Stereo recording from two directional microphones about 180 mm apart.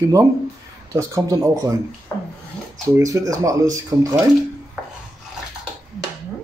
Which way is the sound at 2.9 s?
20° right (ahead or behind).